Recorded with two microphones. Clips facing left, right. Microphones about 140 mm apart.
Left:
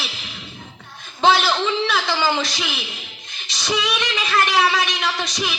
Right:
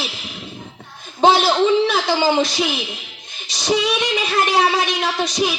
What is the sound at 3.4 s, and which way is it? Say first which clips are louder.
Female singing: right 5 dB; 45° right (ahead or behind).